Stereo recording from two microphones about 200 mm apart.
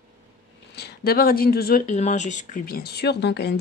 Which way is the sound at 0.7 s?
50° left (ahead or behind).